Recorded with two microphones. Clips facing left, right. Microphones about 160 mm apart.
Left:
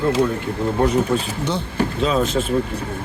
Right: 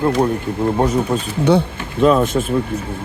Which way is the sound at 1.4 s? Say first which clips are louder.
Right 6 dB; 60° right (ahead or behind).